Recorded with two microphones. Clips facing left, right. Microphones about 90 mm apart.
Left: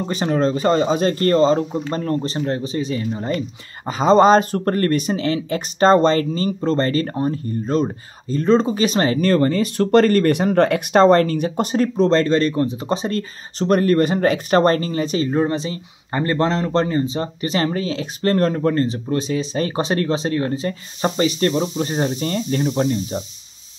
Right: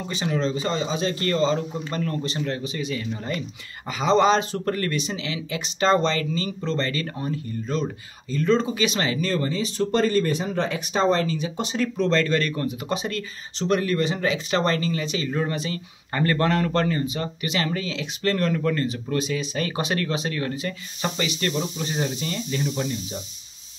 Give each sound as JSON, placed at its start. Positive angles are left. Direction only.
{"t": 0.0, "sound": "speech", "side_deg": 45}